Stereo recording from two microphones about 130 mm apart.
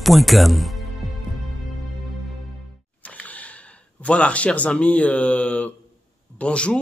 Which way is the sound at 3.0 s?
10° left (ahead or behind).